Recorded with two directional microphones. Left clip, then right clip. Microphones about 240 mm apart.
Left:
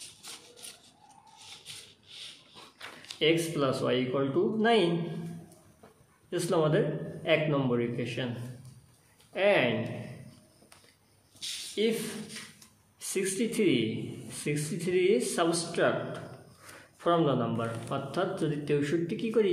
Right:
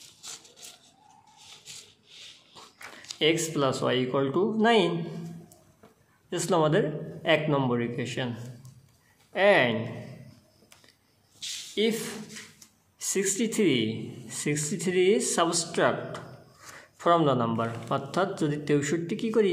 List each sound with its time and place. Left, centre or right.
3.2 s speech: right
6.3 s speech: right
9.3 s speech: right
11.8 s speech: right
13.0 s speech: right